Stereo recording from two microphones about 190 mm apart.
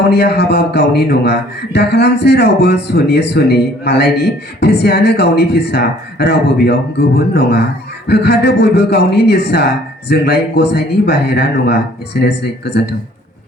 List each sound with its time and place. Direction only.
0.1 s a man's voice: 60° left (ahead or behind)
8.0 s a man's voice: 60° left (ahead or behind)